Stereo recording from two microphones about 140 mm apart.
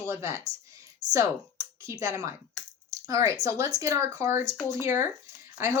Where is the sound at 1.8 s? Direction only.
25° right (ahead or behind).